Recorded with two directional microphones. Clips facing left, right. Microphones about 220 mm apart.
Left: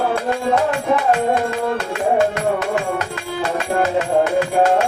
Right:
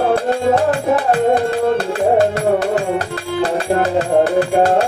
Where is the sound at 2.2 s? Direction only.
35° right (ahead or behind).